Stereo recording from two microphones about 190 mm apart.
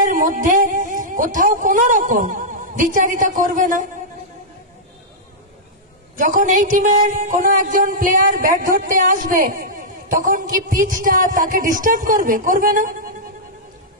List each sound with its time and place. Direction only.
0.1 s speech: 45° right (ahead or behind)
6.1 s speech: 45° right (ahead or behind)